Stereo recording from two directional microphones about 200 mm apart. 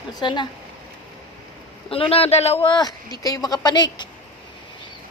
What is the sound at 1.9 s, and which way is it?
Speech, 30° left (ahead or behind).